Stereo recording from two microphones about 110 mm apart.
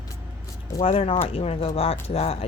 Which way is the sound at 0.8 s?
55° left (ahead or behind).